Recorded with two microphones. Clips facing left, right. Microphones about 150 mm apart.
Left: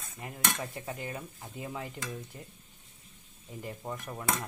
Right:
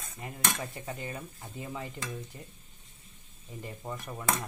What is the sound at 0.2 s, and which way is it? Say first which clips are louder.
Dishes: even; centre (ahead or behind).